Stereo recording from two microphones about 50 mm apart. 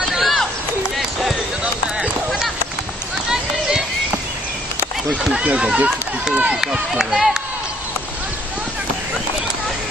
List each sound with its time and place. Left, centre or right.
0.1 s run: centre
0.9 s a sound: centre
3.2 s run: centre
5.4 s speech: right
6.6 s speech: centre